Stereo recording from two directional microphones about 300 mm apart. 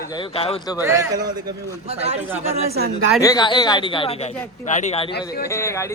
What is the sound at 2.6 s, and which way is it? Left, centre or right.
Speech, right.